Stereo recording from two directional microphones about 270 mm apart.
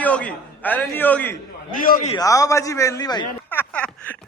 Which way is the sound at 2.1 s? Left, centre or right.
Centre.